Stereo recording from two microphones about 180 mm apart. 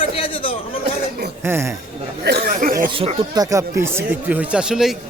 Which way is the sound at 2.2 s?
65° right (ahead or behind).